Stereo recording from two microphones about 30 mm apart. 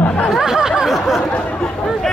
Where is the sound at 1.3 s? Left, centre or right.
Left.